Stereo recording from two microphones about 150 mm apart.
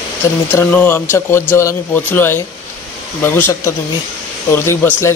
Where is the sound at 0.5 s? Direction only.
15° left (ahead or behind).